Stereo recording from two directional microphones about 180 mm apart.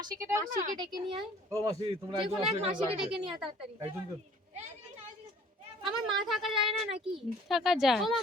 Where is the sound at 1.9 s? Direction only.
30° right (ahead or behind).